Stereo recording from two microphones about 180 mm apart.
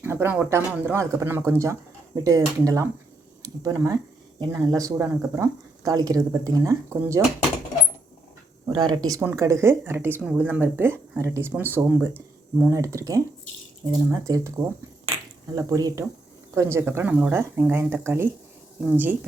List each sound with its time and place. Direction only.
0.0 s speech: 10° right (ahead or behind)
8.6 s speech: 20° right (ahead or behind)
15.5 s speech: 20° right (ahead or behind)